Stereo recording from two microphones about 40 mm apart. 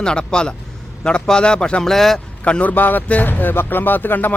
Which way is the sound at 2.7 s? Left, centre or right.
Left.